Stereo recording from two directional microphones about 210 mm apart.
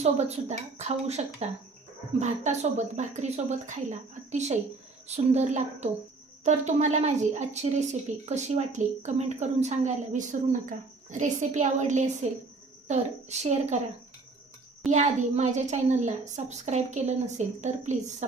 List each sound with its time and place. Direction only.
0.0 s speech: 30° right (ahead or behind)
14.9 s speech: 35° right (ahead or behind)